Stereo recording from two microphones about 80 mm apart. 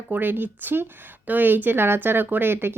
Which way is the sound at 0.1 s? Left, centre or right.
Right.